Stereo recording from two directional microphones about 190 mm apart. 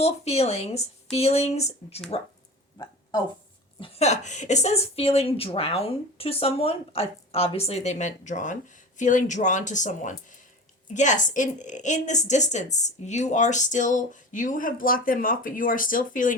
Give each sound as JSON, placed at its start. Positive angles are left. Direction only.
{"t": 0.0, "sound": "a woman's voice", "side_deg": 35}
{"t": 2.7, "sound": "a sound", "side_deg": 20}
{"t": 3.8, "sound": "a woman's voice", "side_deg": 30}